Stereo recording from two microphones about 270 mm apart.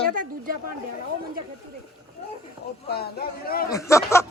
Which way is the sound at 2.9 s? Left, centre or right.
Left.